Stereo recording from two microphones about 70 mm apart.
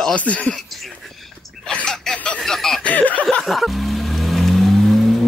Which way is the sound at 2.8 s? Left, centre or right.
Left.